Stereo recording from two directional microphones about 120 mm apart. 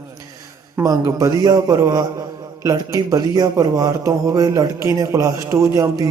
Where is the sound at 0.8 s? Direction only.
30° right (ahead or behind).